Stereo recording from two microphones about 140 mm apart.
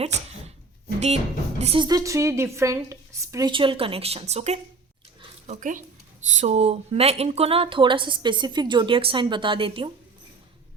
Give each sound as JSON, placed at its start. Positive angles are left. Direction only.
{"t": 0.0, "sound": "dog", "side_deg": -50}
{"t": 0.9, "sound": "a woman's voice", "side_deg": -50}
{"t": 1.8, "sound": "a woman's voice", "side_deg": -25}
{"t": 3.5, "sound": "a woman's voice", "side_deg": -35}
{"t": 5.5, "sound": "speech", "side_deg": -70}
{"t": 6.2, "sound": "speech", "side_deg": -55}